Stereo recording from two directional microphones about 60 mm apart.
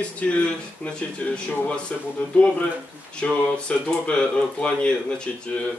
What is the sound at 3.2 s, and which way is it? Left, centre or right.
Speech, centre.